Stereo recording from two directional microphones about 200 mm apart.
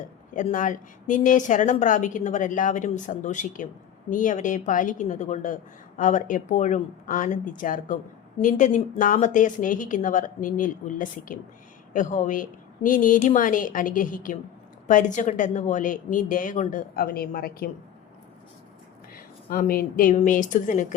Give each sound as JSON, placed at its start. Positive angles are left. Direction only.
{"t": 0.3, "sound": "a woman's voice", "side_deg": 40}
{"t": 19.5, "sound": "a woman's voice", "side_deg": 45}